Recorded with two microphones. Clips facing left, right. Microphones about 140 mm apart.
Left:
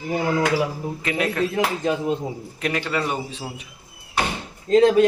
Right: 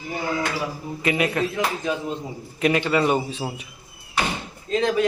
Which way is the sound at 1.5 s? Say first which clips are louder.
Left 3 dB; 45° left (ahead or behind).